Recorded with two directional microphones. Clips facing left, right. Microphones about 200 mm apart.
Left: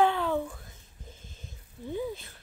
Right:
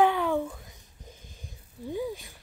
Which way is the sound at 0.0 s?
15° right (ahead or behind).